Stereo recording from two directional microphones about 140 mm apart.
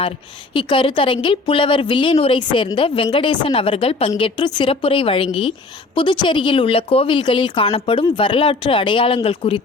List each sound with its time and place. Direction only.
0.5 s a woman's voice: 35° left (ahead or behind)